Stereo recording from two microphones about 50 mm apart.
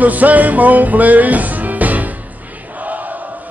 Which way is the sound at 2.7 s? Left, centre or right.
Right.